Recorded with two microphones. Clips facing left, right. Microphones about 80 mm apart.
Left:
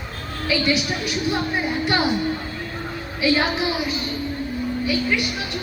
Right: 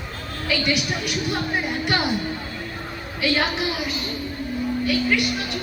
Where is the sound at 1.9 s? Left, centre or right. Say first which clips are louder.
Left 2 dB; left.